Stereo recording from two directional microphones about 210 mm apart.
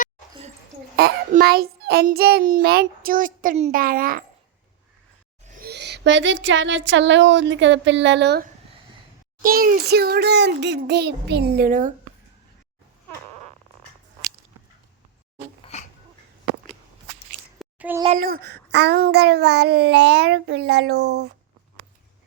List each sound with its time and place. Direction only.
0.9 s a child's voice: 50° right (ahead or behind)
5.5 s speech: 50° right (ahead or behind)
9.4 s a child's voice: 40° right (ahead or behind)
15.6 s dog: 35° left (ahead or behind)
17.3 s a sound: 5° right (ahead or behind)
18.5 s a child's voice: 55° right (ahead or behind)